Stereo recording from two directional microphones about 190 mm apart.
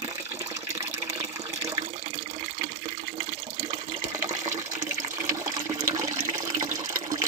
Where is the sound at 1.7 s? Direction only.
35° right (ahead or behind).